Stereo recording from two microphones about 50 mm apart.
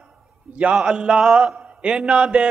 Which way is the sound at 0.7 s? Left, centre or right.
Centre.